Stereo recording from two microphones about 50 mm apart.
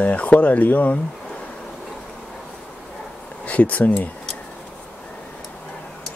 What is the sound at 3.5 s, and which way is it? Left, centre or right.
Speech, left.